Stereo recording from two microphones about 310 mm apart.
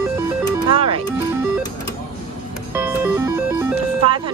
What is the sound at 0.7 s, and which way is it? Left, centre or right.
Speech, centre.